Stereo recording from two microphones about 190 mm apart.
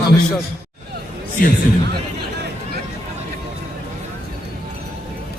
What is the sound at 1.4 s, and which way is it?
Speech, 50° left (ahead or behind).